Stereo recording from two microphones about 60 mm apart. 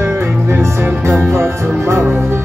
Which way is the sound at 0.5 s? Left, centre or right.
Right.